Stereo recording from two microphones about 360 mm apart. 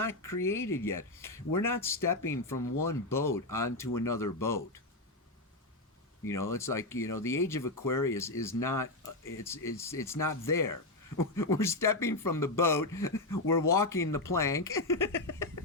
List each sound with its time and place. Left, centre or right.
0.0 s speech: centre
2.6 s speech: left
2.8 s speech: centre
6.2 s speech: centre